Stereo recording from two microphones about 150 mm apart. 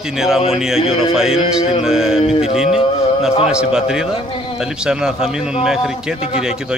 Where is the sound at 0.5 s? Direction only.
5° right (ahead or behind).